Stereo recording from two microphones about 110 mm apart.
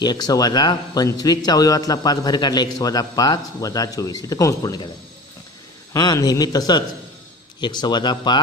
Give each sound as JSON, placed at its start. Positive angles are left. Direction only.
{"t": 0.0, "sound": "a man's voice", "side_deg": 40}
{"t": 5.9, "sound": "a man's voice", "side_deg": 35}